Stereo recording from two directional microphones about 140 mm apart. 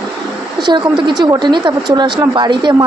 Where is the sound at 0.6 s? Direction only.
35° right (ahead or behind).